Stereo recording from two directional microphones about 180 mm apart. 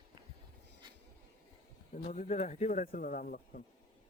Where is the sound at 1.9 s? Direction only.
40° left (ahead or behind).